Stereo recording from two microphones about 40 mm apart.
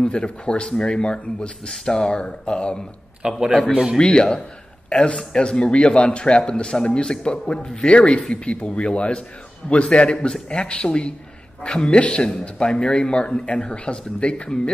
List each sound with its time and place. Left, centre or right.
0.0 s speech: left
3.2 s a man's voice: centre
4.0 s speech: left
4.8 s a sound: left
5.1 s speech: centre